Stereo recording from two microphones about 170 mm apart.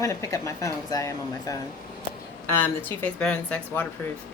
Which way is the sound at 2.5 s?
10° left (ahead or behind).